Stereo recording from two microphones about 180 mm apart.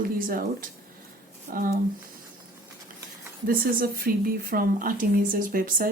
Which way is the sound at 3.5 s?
55° right (ahead or behind).